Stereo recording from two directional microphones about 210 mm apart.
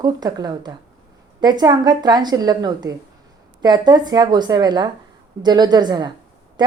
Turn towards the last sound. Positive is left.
turn(degrees=-20)  # may be behind; listen again after turning